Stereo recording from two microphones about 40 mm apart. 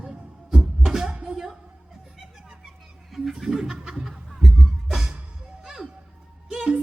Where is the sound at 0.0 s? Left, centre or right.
Centre.